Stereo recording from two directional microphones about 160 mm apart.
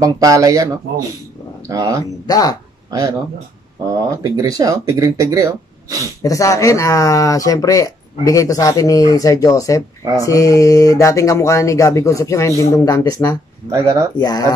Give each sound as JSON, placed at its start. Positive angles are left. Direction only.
{"t": 0.0, "sound": "speech", "side_deg": -20}
{"t": 2.2, "sound": "speech", "side_deg": 25}
{"t": 2.9, "sound": "speech", "side_deg": -25}
{"t": 6.2, "sound": "speech", "side_deg": 20}